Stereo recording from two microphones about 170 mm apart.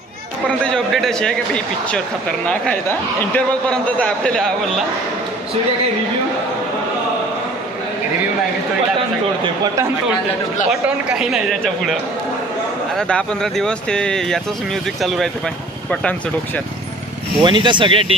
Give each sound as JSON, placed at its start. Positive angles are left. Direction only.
{"t": 0.7, "sound": "speech", "side_deg": 5}
{"t": 10.7, "sound": "speech", "side_deg": -5}
{"t": 17.4, "sound": "speech", "side_deg": -25}